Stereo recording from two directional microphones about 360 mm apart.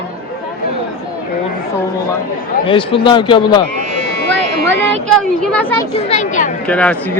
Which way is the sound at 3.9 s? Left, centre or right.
Right.